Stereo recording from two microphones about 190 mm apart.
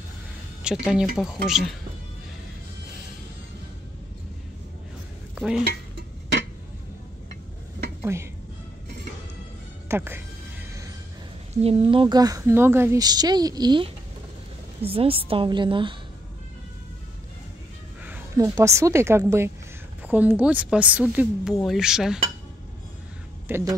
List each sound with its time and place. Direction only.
0.7 s speech: 5° right (ahead or behind)
5.3 s dishes: 5° right (ahead or behind)
8.0 s speech: 15° right (ahead or behind)
9.8 s speech: 10° right (ahead or behind)
11.5 s a woman's voice: 30° right (ahead or behind)
18.0 s a woman's voice: 15° right (ahead or behind)
23.5 s speech: 10° right (ahead or behind)